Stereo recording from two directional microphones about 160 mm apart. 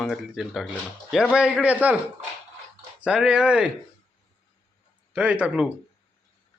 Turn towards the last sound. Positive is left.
turn(degrees=-5)  # may be behind; listen again after turning